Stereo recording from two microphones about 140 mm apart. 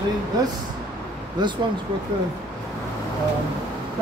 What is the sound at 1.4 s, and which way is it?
Speech, 30° right (ahead or behind).